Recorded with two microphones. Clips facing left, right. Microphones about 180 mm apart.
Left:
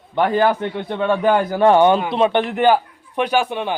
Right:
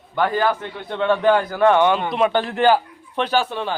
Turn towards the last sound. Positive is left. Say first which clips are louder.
# left 2 dB
turn(degrees=15)  # may be behind; listen again after turning